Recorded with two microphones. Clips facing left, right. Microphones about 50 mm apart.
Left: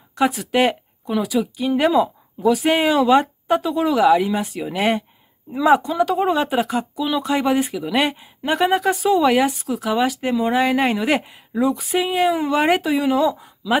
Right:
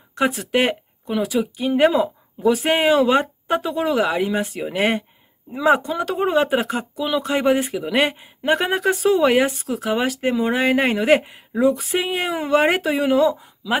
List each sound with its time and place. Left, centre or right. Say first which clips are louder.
0.1 s speech: left 1 dB; right
4.6 s speech: left 1 dB; centre
6.0 s speech: even; right
13.1 s speech: right 1 dB; centre